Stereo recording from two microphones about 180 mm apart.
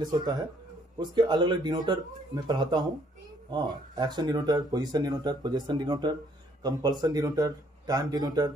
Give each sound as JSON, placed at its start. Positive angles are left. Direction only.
{"t": 0.0, "sound": "speech", "side_deg": -25}